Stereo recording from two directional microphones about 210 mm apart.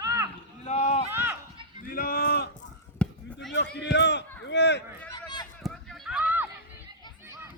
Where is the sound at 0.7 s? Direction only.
30° left (ahead or behind).